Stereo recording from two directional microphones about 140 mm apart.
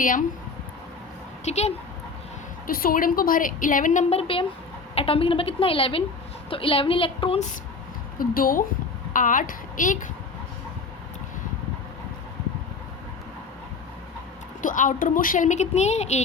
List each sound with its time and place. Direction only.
0.0 s a woman's voice: 75° left (ahead or behind)
1.5 s speech: 50° left (ahead or behind)
2.6 s a woman's voice: 90° left; by 4.0 s 70° left (ahead or behind)
4.1 s a woman's voice: 40° left (ahead or behind)
8.2 s a woman's voice: 90° left
9.1 s a woman's voice: 70° left (ahead or behind)
14.6 s a woman's voice: 70° left (ahead or behind); by 16.2 s 55° left (ahead or behind)